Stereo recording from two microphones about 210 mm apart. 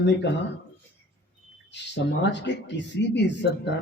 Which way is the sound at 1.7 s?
55° left (ahead or behind).